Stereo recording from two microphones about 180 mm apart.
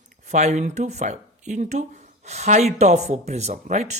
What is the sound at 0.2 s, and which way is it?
Speech, 40° right (ahead or behind).